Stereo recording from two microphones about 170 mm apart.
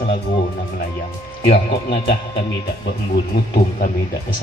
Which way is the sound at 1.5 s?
75° left (ahead or behind).